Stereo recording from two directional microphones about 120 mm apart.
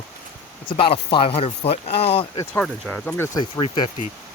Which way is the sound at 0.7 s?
50° left (ahead or behind).